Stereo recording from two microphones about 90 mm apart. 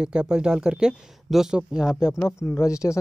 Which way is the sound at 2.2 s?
30° left (ahead or behind).